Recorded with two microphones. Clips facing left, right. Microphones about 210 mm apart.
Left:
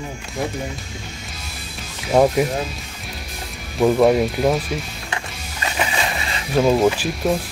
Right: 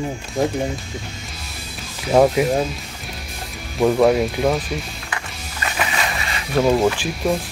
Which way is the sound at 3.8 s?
Centre (ahead or behind).